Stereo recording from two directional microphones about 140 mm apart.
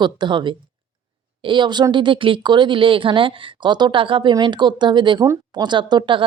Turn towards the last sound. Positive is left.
turn(degrees=-35)  # may be behind; listen again after turning